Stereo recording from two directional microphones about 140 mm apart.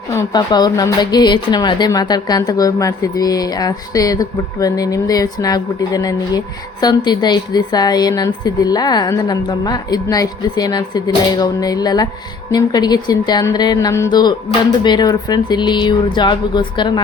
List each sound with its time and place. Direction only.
0.3 s a woman's voice: 30° left (ahead or behind)